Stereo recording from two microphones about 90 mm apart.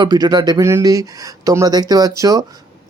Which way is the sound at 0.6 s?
35° right (ahead or behind).